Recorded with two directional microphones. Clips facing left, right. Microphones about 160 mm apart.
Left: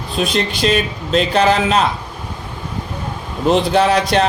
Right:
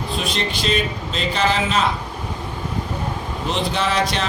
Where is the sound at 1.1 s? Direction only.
55° left (ahead or behind).